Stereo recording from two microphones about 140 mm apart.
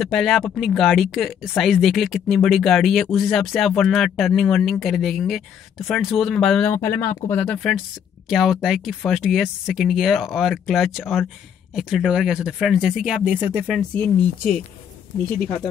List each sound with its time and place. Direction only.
0.0 s speech: centre (ahead or behind)
6.7 s speech: 20° left (ahead or behind)
7.6 s speech: centre (ahead or behind)